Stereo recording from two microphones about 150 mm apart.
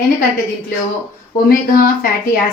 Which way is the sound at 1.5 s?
75° left (ahead or behind).